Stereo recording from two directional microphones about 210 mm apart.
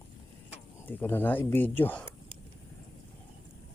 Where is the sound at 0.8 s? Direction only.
10° left (ahead or behind).